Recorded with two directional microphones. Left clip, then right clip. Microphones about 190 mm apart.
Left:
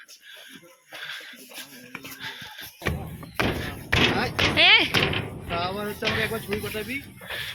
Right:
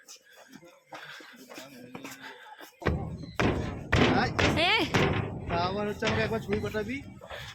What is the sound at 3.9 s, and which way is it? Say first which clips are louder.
Thump: left 3 dB; 25° right (ahead or behind).